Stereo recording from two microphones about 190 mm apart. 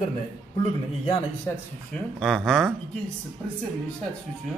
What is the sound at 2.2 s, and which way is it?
Speech, centre (ahead or behind).